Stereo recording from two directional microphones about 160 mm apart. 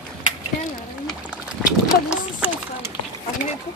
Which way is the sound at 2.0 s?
10° right (ahead or behind).